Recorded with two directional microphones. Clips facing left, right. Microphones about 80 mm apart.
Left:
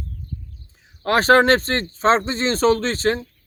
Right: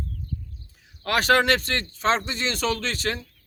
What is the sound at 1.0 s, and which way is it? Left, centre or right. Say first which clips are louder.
A man's voice: left 6 dB; left.